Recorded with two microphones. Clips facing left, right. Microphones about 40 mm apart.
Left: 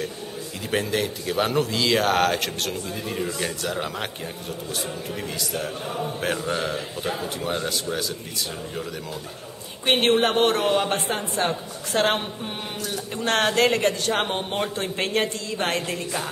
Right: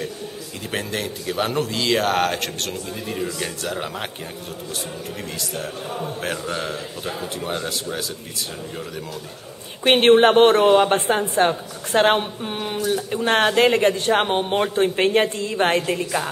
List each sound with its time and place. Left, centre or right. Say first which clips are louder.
0.7 s a man's voice: left 2 dB; centre
5.4 s a man's voice: even; centre
9.8 s a woman's voice: right 6 dB; right